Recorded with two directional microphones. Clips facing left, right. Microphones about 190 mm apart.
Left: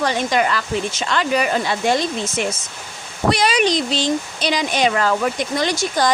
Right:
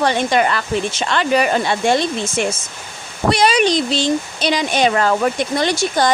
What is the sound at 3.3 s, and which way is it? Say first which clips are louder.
Speech: right 5 dB; 25° right (ahead or behind).